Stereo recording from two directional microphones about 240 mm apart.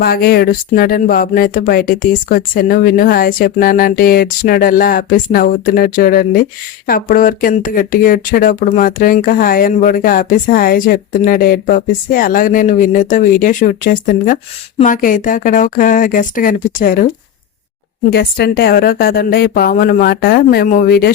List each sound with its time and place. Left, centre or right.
0.0 s speech: left
18.1 s speech: left